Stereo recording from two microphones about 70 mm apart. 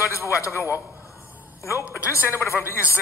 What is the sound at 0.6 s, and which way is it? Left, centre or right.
Speech, right.